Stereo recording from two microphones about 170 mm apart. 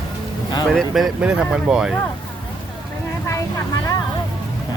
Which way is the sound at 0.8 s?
Centre (ahead or behind).